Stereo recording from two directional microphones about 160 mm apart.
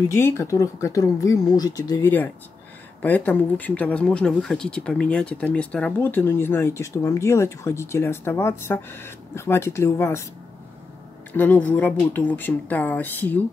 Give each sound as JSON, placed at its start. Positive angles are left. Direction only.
{"t": 0.1, "sound": "speech", "side_deg": 15}
{"t": 11.3, "sound": "speech", "side_deg": 10}